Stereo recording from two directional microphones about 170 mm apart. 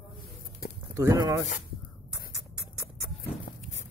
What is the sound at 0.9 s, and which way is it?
Speech, 20° right (ahead or behind).